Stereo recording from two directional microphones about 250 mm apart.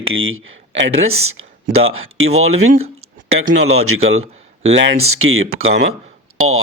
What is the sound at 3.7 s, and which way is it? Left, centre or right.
Speech, right.